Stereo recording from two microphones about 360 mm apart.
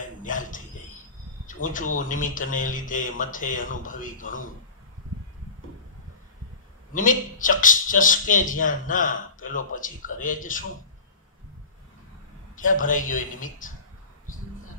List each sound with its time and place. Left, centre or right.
0.0 s a sound: left
2.0 s a man's voice: left
6.9 s a man's voice: left
12.5 s a man's voice: left